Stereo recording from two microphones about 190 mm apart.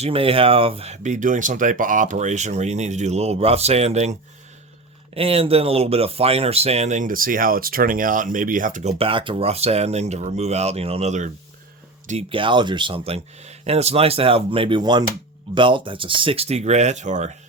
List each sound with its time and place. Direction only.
0.0 s speech: 30° right (ahead or behind)